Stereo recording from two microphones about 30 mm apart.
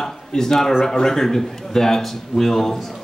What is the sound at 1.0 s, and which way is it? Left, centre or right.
A man's voice, centre.